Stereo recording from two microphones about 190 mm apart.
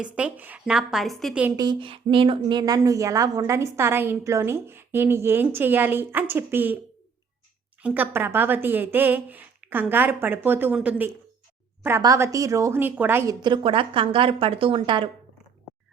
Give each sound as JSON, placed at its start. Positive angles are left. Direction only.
{"t": 0.0, "sound": "a woman's voice", "side_deg": -5}
{"t": 1.5, "sound": "speech", "side_deg": -25}
{"t": 7.8, "sound": "speech", "side_deg": -10}
{"t": 13.4, "sound": "a woman's voice", "side_deg": -25}